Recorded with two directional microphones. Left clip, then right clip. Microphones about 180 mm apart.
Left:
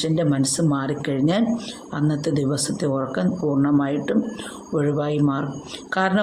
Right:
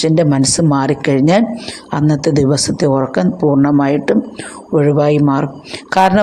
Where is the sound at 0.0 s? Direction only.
40° right (ahead or behind).